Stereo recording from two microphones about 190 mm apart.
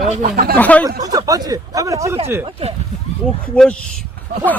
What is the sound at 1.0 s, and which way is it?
Speech, 20° right (ahead or behind).